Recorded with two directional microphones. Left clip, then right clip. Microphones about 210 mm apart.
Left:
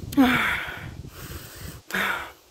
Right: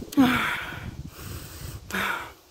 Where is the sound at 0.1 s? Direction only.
Centre (ahead or behind).